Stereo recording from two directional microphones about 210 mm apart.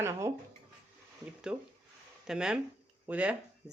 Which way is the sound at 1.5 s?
5° right (ahead or behind).